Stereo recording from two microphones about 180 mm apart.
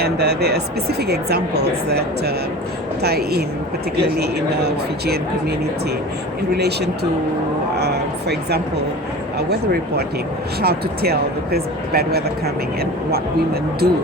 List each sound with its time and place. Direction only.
0.0 s a woman's voice: 65° right (ahead or behind)
6.6 s a woman's voice: 65° right (ahead or behind)
10.6 s a woman's voice: 60° right (ahead or behind)